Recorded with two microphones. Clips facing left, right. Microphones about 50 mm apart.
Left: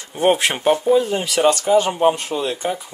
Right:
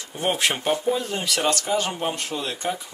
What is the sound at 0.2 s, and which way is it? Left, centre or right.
Speech, left.